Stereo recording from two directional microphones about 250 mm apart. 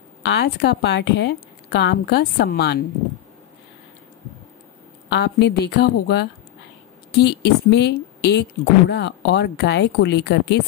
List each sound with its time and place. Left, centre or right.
0.2 s speech: left
5.1 s speech: left